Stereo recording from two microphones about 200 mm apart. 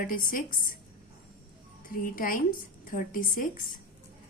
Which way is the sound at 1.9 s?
45° left (ahead or behind).